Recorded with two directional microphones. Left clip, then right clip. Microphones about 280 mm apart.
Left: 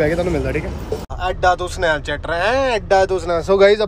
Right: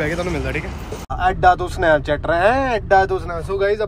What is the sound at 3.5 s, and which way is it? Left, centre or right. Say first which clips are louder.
Speech: left 7 dB; left.